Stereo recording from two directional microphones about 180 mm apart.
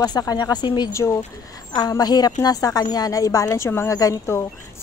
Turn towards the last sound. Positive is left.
turn(degrees=15)  # may be behind; listen again after turning